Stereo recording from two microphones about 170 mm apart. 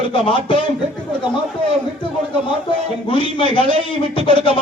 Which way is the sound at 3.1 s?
30° left (ahead or behind).